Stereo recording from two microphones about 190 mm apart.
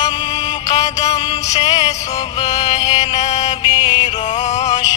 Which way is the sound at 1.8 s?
20° left (ahead or behind).